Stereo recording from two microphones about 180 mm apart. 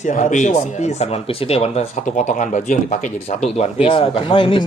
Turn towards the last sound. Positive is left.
turn(degrees=30)  # may be behind; listen again after turning